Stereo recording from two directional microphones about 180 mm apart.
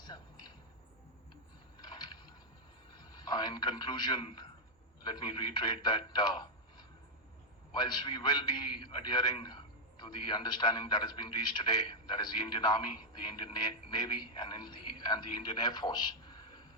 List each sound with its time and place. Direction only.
0.0 s a sound: 25° left (ahead or behind)
3.0 s a man's voice: 25° left (ahead or behind)
7.7 s a man's voice: 25° left (ahead or behind)